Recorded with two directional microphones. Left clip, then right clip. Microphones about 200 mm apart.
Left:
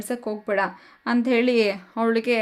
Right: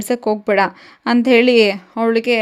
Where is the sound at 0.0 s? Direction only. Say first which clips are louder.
Right 11 dB; 35° right (ahead or behind).